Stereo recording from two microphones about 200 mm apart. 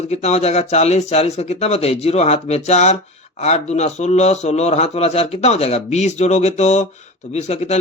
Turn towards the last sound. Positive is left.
turn(degrees=35)  # may be behind; listen again after turning